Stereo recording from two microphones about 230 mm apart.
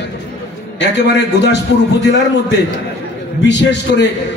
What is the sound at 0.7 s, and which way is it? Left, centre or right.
Speech, left.